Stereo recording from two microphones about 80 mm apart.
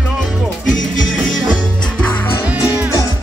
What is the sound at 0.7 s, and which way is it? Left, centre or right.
Music, centre.